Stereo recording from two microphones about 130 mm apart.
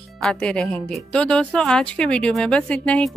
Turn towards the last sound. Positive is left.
turn(degrees=10)  # may be behind; listen again after turning